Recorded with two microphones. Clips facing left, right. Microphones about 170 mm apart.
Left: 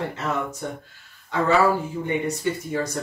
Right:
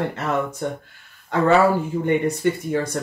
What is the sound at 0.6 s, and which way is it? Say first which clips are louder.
Speech: right 5 dB; 65° right (ahead or behind).